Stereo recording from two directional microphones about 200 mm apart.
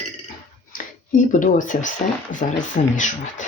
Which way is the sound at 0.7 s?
40° left (ahead or behind).